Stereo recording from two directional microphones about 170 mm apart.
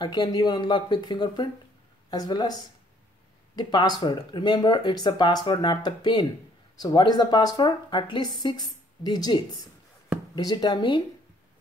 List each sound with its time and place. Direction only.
0.0 s speech: 25° left (ahead or behind)
3.5 s speech: 25° left (ahead or behind)